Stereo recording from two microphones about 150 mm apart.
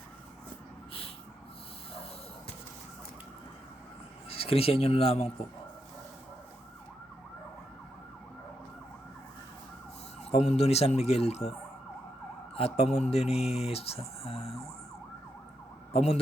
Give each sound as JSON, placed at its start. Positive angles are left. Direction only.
{"t": 4.3, "sound": "speech", "side_deg": 40}
{"t": 10.3, "sound": "speech", "side_deg": 45}
{"t": 12.5, "sound": "speech", "side_deg": 45}
{"t": 15.9, "sound": "speech", "side_deg": 45}